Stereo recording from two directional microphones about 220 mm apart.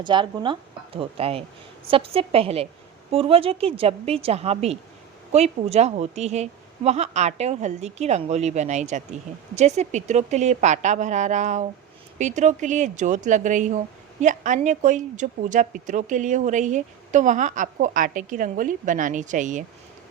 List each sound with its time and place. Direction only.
0.0 s a woman's voice: 20° right (ahead or behind)